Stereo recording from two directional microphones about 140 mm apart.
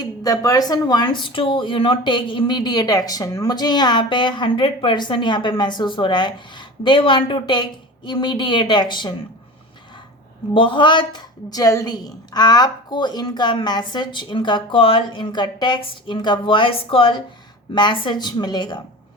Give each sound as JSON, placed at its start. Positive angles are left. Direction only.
{"t": 0.0, "sound": "speech", "side_deg": 25}
{"t": 10.5, "sound": "speech", "side_deg": 35}